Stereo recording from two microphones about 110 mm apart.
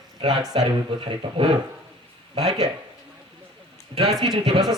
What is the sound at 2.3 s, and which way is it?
Speech, 75° right (ahead or behind).